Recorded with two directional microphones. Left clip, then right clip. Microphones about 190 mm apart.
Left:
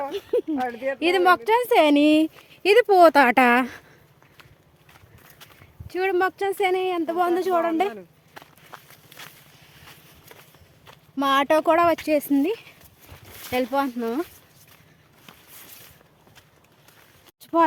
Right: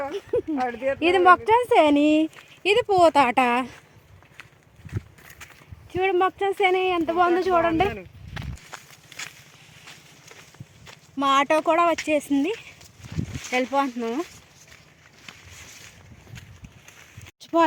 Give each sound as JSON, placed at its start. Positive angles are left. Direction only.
{"t": 0.1, "sound": "a sound", "side_deg": 5}
{"t": 0.5, "sound": "speech", "side_deg": -50}
{"t": 1.0, "sound": "speech", "side_deg": -15}
{"t": 2.0, "sound": "speech", "side_deg": 20}
{"t": 2.6, "sound": "speech", "side_deg": 50}
{"t": 5.9, "sound": "speech", "side_deg": 0}
{"t": 8.3, "sound": "walk", "side_deg": -5}
{"t": 11.2, "sound": "speech", "side_deg": 25}